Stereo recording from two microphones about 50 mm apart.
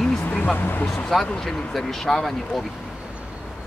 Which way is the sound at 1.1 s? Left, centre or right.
Centre.